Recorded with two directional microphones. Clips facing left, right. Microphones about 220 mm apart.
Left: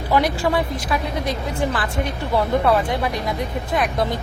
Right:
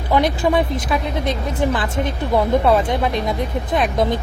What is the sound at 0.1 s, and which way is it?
A woman's voice, 20° right (ahead or behind).